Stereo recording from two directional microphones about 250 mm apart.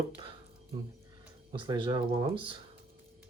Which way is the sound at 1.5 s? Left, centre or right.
Centre.